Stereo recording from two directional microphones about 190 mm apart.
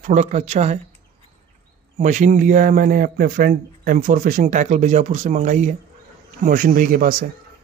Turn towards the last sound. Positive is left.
turn(degrees=-50)  # may be behind; listen again after turning